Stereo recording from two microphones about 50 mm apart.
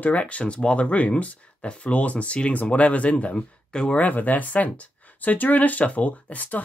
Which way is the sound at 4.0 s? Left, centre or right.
Left.